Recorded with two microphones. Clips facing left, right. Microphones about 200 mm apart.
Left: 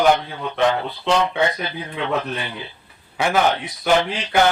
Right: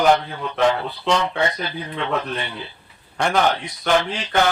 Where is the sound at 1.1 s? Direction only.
Centre (ahead or behind).